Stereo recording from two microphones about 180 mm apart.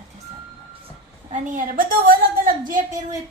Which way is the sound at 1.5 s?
50° right (ahead or behind).